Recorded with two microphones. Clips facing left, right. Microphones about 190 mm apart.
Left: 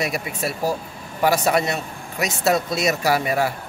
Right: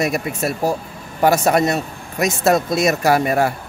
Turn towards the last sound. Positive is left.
turn(degrees=-50)  # may be behind; listen again after turning